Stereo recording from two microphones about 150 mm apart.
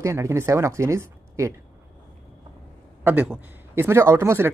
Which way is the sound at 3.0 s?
10° right (ahead or behind).